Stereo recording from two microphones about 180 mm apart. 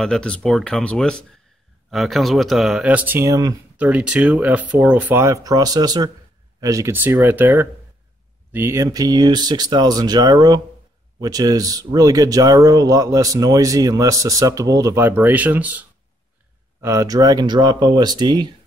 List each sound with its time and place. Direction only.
0.0 s speech: 5° left (ahead or behind); by 3.5 s 20° right (ahead or behind)
3.7 s speech: 5° right (ahead or behind); by 18.5 s 25° right (ahead or behind)